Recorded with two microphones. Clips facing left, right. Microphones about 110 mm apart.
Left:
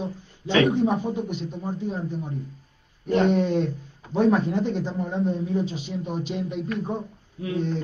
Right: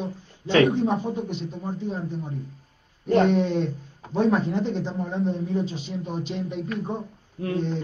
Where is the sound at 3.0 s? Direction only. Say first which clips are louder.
Right 1 dB; 45° right (ahead or behind).